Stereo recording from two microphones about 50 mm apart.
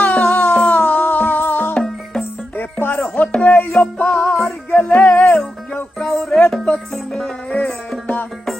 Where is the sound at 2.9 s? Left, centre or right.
Left.